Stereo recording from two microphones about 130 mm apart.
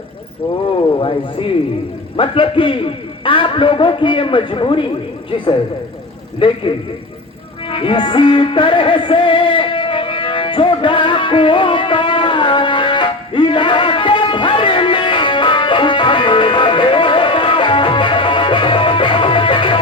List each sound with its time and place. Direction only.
0.9 s a man's voice: 40° left (ahead or behind)
6.4 s a man's voice: 40° left (ahead or behind)
7.7 s music: 40° left (ahead or behind)